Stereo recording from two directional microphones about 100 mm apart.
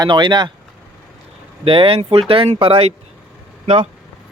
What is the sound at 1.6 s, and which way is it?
Speech, 65° right (ahead or behind).